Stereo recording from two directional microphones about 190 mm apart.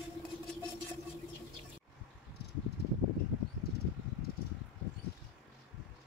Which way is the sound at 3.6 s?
55° left (ahead or behind).